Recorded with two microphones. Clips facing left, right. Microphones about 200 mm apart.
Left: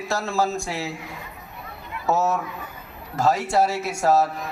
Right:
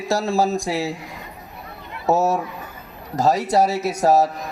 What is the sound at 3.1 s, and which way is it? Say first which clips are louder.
A man's voice: right 3 dB; 40° right (ahead or behind).